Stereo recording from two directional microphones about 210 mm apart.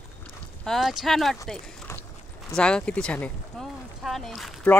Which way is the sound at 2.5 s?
5° left (ahead or behind).